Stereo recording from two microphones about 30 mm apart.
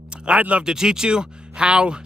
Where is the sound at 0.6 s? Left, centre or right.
Right.